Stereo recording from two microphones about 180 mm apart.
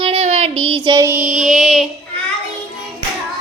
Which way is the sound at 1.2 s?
Centre (ahead or behind).